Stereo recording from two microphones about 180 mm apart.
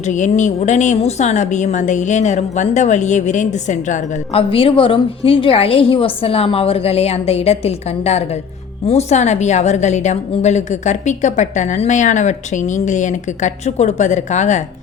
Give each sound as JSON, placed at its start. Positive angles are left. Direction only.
{"t": 0.0, "sound": "speech", "side_deg": 40}